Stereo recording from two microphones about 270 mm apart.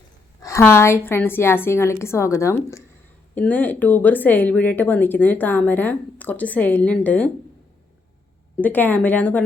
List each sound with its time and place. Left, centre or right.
0.4 s speech: centre
8.6 s a woman's voice: centre